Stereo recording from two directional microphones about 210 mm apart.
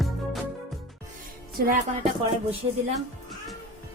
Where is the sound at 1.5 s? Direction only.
45° right (ahead or behind).